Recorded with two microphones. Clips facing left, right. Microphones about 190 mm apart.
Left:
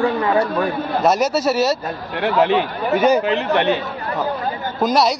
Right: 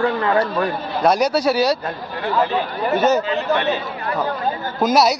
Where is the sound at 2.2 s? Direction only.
80° left.